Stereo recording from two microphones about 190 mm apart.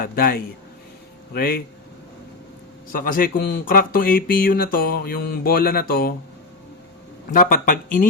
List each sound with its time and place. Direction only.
0.0 s speech: 50° left (ahead or behind)
2.9 s speech: 50° left (ahead or behind)
7.3 s speech: 45° left (ahead or behind)